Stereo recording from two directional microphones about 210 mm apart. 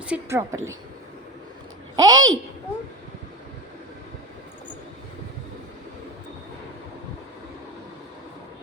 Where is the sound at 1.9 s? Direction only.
20° right (ahead or behind).